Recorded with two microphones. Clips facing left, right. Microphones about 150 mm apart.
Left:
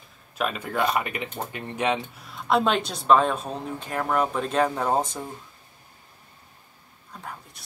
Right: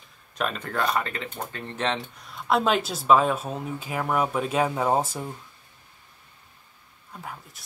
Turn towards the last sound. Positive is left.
turn(degrees=-5)  # may be behind; listen again after turning